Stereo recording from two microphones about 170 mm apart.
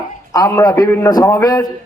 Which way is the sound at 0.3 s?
20° left (ahead or behind).